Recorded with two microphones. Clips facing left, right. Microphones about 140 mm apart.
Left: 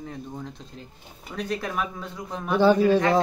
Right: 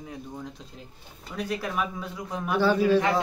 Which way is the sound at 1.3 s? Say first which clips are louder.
Left 1 dB; 5° right (ahead or behind).